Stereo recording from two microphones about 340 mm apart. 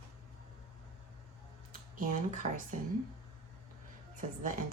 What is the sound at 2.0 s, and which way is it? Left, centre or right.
Speech, right.